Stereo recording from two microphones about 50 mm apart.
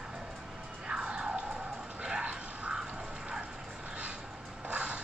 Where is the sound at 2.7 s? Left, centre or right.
Centre.